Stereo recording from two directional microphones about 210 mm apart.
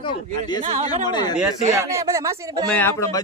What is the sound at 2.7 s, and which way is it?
Speech, 10° left (ahead or behind).